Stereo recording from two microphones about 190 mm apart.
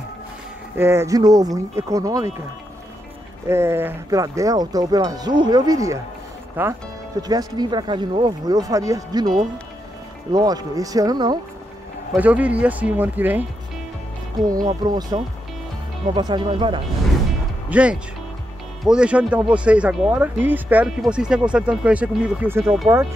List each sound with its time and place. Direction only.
0.7 s speech: 15° right (ahead or behind)
3.4 s speech: 15° right (ahead or behind)
7.2 s speech: 20° right (ahead or behind)
10.3 s speech: 20° right (ahead or behind)
12.2 s speech: 5° right (ahead or behind)
14.7 s speech: 20° right (ahead or behind)
16.2 s speech: 25° right (ahead or behind)
17.6 s speech: 5° right (ahead or behind)